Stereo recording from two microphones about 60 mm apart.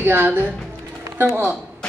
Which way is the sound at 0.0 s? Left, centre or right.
Right.